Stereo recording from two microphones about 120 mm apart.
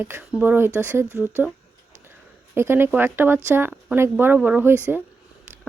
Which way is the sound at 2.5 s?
20° right (ahead or behind).